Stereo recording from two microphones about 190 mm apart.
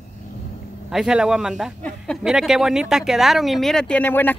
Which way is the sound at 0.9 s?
5° right (ahead or behind).